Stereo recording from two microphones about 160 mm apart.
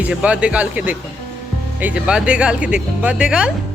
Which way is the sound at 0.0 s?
5° right (ahead or behind).